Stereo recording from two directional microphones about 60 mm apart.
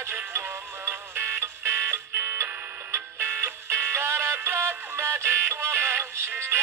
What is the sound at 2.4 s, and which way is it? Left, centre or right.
Music, right.